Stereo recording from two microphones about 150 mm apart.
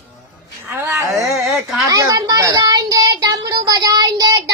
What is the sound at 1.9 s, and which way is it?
Child singing, 25° right (ahead or behind).